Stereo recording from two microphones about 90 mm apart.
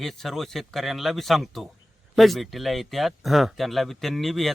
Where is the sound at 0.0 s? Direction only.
Centre (ahead or behind).